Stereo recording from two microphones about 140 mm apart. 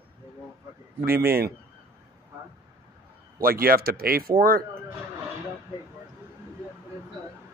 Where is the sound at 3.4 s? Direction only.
90° right.